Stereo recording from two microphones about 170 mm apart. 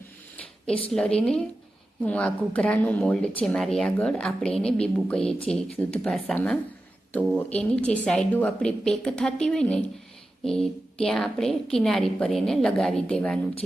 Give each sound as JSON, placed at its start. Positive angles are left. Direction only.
{"t": 0.9, "sound": "a woman's voice", "side_deg": 5}